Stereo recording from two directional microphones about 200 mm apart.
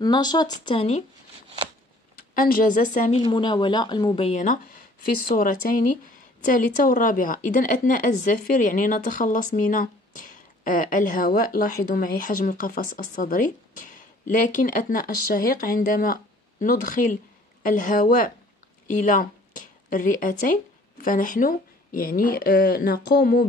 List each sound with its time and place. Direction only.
0.0 s speech: 20° left (ahead or behind)
2.3 s a woman's voice: 45° left (ahead or behind)
3.2 s a woman's voice: 25° left (ahead or behind); by 23.4 s 50° left (ahead or behind)